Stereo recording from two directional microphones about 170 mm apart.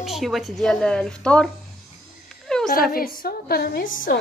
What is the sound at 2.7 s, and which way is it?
A woman's voice, 60° left (ahead or behind).